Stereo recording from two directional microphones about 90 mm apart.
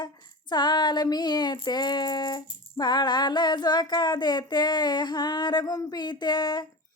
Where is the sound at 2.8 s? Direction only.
55° left (ahead or behind).